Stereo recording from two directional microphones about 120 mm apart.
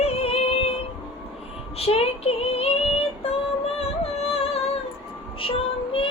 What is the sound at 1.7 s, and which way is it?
Female singing, 55° left (ahead or behind).